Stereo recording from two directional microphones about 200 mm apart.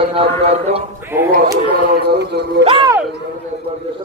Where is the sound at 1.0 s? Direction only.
10° right (ahead or behind).